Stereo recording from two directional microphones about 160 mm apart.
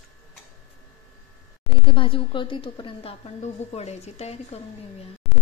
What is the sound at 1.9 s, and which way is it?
A woman's voice, 30° left (ahead or behind).